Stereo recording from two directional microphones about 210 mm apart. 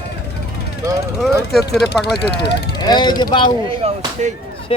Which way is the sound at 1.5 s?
50° left (ahead or behind).